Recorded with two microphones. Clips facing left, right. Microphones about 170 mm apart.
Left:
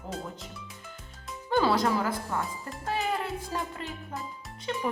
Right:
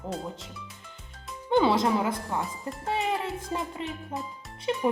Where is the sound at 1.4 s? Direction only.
20° right (ahead or behind).